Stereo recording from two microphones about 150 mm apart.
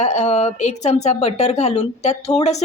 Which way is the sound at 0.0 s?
50° left (ahead or behind).